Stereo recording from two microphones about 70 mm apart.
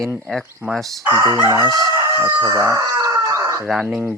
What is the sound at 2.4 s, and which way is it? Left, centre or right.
Speech, right.